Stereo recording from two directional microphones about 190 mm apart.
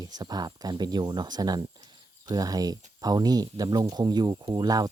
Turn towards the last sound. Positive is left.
turn(degrees=-20)  # may be behind; listen again after turning